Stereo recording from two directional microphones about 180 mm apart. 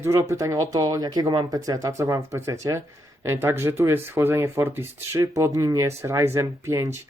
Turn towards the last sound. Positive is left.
turn(degrees=-15)  # may be behind; listen again after turning